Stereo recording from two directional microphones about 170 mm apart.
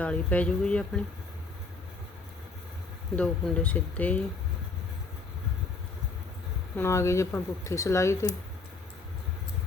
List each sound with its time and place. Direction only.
0.0 s speech: 10° left (ahead or behind)
3.2 s speech: 5° left (ahead or behind)
6.7 s speech: 15° left (ahead or behind)